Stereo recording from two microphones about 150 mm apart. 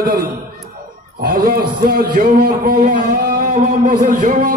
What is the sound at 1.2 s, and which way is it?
A man's voice, 75° right (ahead or behind).